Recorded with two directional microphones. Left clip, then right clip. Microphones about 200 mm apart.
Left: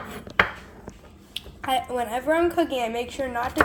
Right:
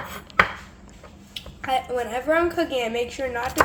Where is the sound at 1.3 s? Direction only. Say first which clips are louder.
Right 1 dB; 25° left (ahead or behind).